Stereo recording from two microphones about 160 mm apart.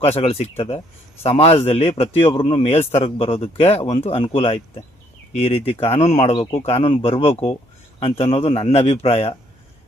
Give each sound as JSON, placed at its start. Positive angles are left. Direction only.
{"t": 0.0, "sound": "speech", "side_deg": 40}